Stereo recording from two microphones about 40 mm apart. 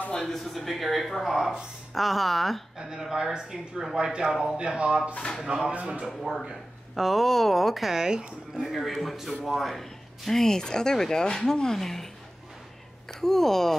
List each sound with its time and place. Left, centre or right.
0.1 s speech: centre
3.0 s speech: centre
5.4 s speech: centre
5.7 s speech: right
6.0 s speech: centre
8.0 s speech: centre
8.5 s speech: centre
13.2 s speech: centre